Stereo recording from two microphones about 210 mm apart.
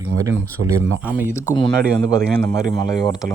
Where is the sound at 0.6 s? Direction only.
80° right.